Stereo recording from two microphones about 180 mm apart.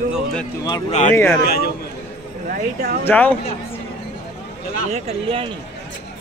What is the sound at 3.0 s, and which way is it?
Speech, 10° left (ahead or behind).